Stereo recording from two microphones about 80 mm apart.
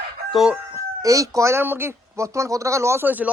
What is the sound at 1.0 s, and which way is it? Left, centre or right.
Speech, right.